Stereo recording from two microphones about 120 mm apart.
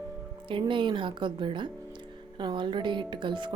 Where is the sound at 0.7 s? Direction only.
45° right (ahead or behind).